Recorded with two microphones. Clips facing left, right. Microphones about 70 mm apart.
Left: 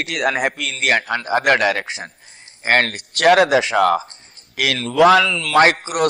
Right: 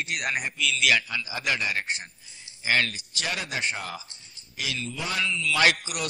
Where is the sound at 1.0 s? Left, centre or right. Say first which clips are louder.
Left 13 dB; left.